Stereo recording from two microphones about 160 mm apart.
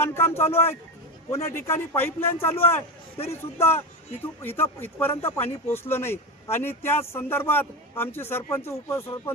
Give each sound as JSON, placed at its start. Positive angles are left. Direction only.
{"t": 0.0, "sound": "speech", "side_deg": 15}